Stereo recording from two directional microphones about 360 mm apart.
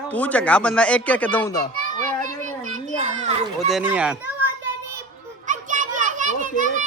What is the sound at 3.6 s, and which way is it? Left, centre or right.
Speech, centre.